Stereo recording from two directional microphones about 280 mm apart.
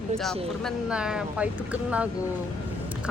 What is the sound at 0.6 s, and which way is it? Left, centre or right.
Speech, centre.